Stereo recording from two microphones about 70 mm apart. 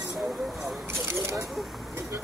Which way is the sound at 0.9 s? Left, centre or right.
Right.